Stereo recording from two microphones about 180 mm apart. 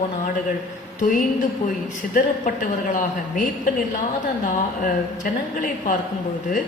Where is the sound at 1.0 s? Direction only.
45° left (ahead or behind).